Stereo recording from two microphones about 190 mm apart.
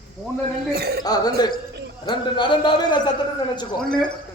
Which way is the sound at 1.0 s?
20° left (ahead or behind).